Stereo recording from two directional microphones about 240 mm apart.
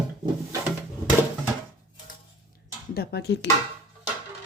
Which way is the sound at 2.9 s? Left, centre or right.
Left.